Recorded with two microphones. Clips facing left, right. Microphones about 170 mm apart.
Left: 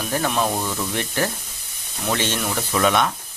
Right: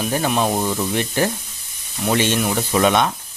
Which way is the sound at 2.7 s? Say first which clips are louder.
Right 2 dB; 25° right (ahead or behind).